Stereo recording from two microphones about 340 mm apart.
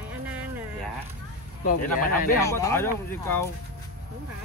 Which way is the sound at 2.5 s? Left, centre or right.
Centre.